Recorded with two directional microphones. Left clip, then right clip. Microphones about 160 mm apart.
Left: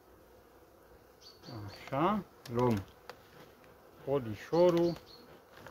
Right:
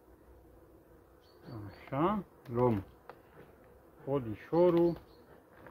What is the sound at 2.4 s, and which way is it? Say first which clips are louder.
Bee: right 2 dB; 5° right (ahead or behind).